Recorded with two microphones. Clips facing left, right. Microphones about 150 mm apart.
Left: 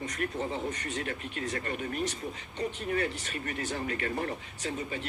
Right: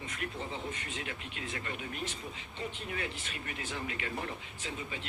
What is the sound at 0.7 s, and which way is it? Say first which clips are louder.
Speech: left 6 dB; 40° left (ahead or behind).